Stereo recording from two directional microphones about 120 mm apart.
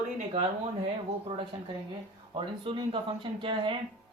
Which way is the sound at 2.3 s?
45° right (ahead or behind).